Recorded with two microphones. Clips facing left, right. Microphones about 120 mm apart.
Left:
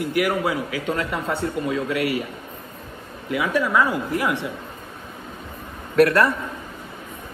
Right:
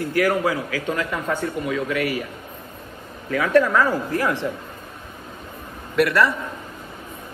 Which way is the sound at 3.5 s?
5° left (ahead or behind).